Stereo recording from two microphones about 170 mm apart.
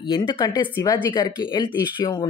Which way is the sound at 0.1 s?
25° left (ahead or behind).